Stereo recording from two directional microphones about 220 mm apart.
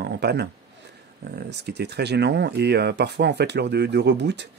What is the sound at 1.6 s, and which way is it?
Speech, 50° right (ahead or behind).